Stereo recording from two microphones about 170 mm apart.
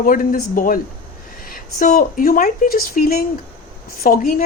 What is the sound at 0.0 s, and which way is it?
Speech, 55° left (ahead or behind).